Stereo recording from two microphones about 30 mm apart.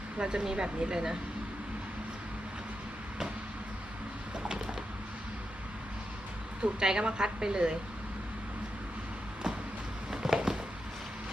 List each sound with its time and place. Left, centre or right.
0.2 s a woman's voice: right
6.6 s a woman's voice: right
10.1 s a sound: centre